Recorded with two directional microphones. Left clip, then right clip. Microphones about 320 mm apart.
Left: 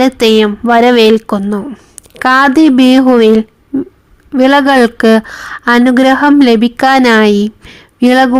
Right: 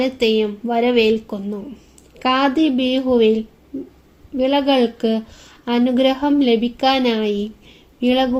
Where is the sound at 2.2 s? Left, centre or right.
Left.